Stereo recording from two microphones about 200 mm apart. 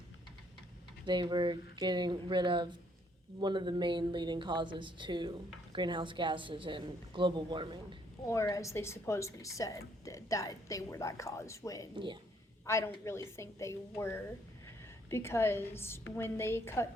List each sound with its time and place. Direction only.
1.0 s a woman's voice: 20° right (ahead or behind)
8.3 s speech: 15° left (ahead or behind)